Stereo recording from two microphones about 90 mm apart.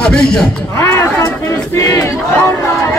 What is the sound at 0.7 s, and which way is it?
Speech, 35° left (ahead or behind).